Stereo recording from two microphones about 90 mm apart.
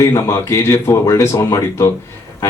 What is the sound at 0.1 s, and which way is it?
A man's voice, 45° left (ahead or behind).